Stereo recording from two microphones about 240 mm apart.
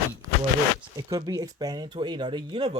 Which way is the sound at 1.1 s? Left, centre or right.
Centre.